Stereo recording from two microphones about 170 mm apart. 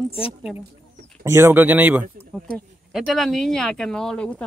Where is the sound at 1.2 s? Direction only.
15° right (ahead or behind).